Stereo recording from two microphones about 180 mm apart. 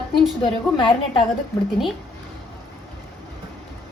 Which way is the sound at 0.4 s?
25° left (ahead or behind).